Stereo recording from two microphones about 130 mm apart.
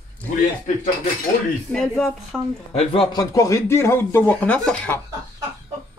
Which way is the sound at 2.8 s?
45° left (ahead or behind).